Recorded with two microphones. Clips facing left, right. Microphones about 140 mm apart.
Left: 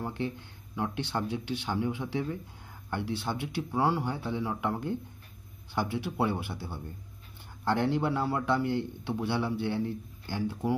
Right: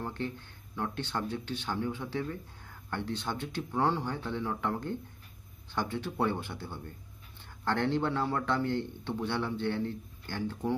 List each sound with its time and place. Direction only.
0.0 s a man's voice: 15° left (ahead or behind)